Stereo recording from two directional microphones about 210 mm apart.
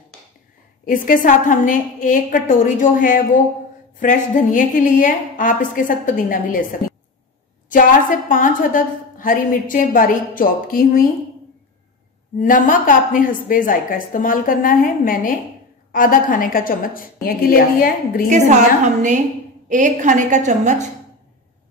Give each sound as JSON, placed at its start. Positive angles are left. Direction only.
{"t": 0.8, "sound": "a woman's voice", "side_deg": 40}
{"t": 7.7, "sound": "a woman's voice", "side_deg": 40}
{"t": 12.4, "sound": "a woman's voice", "side_deg": 40}
{"t": 18.3, "sound": "a woman's voice", "side_deg": -35}
{"t": 19.7, "sound": "a woman's voice", "side_deg": -35}